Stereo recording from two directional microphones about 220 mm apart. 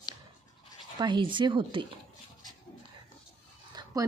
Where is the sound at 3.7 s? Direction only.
15° right (ahead or behind).